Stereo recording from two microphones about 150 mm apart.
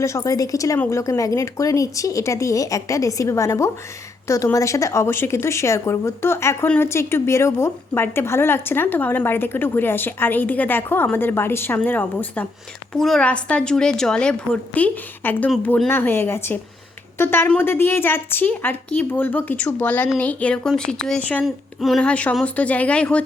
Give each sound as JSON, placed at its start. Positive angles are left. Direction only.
{"t": 0.0, "sound": "a woman's voice", "side_deg": 20}